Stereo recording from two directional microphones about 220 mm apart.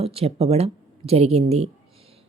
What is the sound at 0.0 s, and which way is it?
A woman's voice, 25° right (ahead or behind).